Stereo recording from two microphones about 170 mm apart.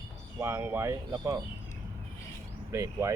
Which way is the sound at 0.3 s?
15° right (ahead or behind).